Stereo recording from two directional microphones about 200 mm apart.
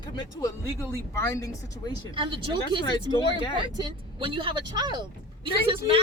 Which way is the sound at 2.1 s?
25° right (ahead or behind).